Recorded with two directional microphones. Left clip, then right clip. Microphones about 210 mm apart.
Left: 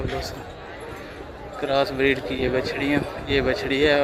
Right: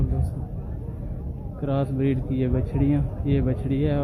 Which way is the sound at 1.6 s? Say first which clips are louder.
Left 6 dB; centre (ahead or behind).